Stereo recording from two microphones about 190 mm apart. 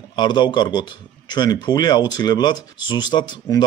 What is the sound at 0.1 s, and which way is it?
Speech, 25° left (ahead or behind).